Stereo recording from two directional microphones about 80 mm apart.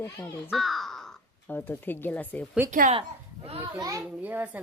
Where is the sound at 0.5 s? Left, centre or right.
Centre.